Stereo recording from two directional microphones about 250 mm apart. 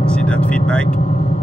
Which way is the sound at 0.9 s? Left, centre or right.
Left.